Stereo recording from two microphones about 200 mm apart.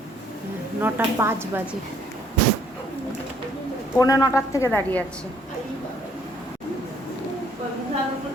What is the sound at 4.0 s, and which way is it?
A woman's voice, 20° left (ahead or behind).